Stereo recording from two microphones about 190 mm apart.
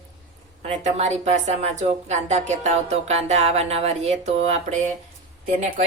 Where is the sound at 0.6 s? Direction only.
35° right (ahead or behind).